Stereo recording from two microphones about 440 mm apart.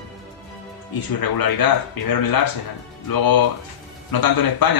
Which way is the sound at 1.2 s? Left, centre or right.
Left.